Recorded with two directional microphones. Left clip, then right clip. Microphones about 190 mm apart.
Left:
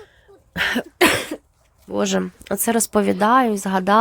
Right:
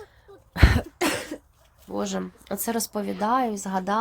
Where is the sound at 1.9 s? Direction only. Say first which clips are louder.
Left 8 dB; 25° left (ahead or behind).